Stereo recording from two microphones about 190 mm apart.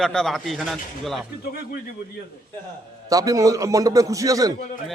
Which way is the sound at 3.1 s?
20° right (ahead or behind).